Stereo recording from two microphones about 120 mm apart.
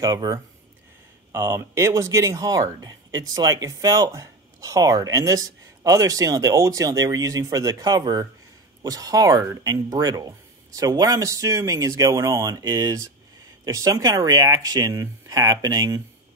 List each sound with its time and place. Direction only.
0.0 s speech: 30° right (ahead or behind)